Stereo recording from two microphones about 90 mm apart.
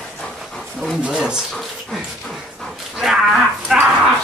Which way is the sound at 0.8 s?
5° right (ahead or behind).